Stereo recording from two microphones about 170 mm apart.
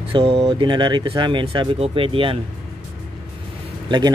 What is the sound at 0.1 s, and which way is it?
Speech, 35° right (ahead or behind).